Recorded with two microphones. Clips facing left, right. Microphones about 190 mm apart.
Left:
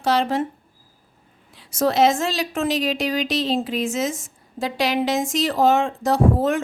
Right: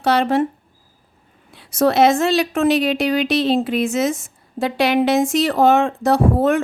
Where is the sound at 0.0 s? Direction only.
65° right (ahead or behind).